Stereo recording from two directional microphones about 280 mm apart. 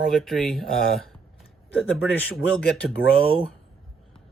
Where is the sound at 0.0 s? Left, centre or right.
Centre.